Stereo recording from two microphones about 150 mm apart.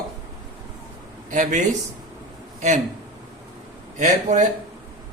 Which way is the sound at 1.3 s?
55° right (ahead or behind).